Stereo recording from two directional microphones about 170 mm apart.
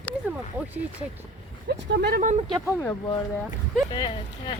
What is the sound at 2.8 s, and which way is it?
Speech, 20° left (ahead or behind).